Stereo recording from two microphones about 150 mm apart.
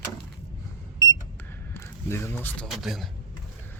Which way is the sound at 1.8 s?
20° left (ahead or behind).